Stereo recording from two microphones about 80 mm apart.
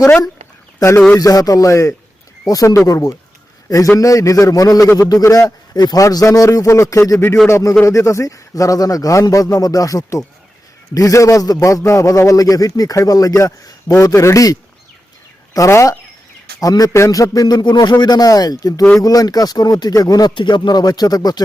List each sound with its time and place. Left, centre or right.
0.8 s speech: left
1.1 s a man's voice: left
5.2 s a man's voice: left
20.3 s speech: left